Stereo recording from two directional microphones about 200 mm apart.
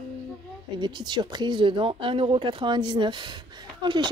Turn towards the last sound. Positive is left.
turn(degrees=-25)  # may be behind; listen again after turning